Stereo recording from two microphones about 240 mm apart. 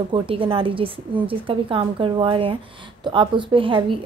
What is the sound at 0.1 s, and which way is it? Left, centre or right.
A woman's voice, right.